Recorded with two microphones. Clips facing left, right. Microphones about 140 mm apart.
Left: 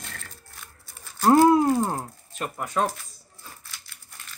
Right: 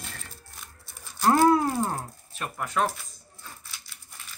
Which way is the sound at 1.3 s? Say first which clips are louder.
Left 4 dB; 20° left (ahead or behind).